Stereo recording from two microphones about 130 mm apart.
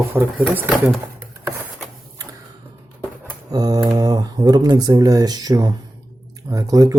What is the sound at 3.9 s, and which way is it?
Speech, 30° right (ahead or behind).